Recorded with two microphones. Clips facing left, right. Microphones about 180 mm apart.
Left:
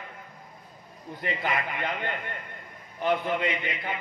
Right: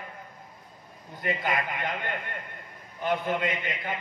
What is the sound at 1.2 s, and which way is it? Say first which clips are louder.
A man's voice: right 1 dB; 45° right (ahead or behind).